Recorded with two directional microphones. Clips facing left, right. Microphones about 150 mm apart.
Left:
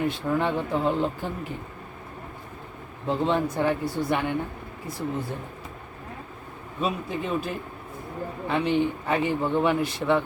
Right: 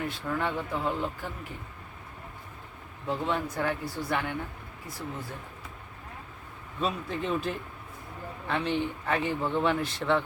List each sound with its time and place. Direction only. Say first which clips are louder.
0.0 s speech: left 6 dB; 20° left (ahead or behind)
3.1 s speech: left 6 dB; 25° left (ahead or behind)
6.7 s speech: left 3 dB; 10° left (ahead or behind)